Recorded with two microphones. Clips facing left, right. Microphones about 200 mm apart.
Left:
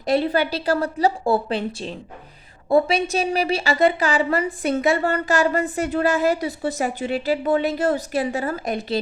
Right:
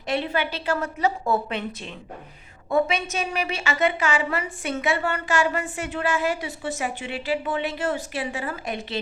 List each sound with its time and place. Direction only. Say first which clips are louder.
0.0 s a woman's voice: left 6 dB; 40° left (ahead or behind)